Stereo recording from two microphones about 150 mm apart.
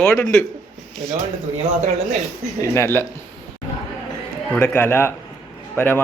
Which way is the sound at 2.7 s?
15° left (ahead or behind).